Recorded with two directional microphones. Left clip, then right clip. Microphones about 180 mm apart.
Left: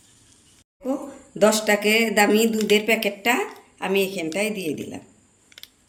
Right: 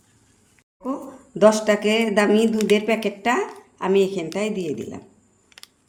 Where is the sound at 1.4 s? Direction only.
55° right (ahead or behind).